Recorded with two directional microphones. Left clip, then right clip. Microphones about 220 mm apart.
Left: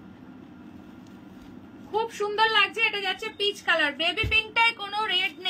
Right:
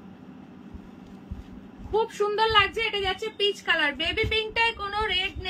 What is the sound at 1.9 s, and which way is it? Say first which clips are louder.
A woman's voice: right 3 dB; 10° right (ahead or behind).